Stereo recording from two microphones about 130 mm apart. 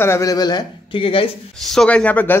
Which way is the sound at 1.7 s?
5° left (ahead or behind).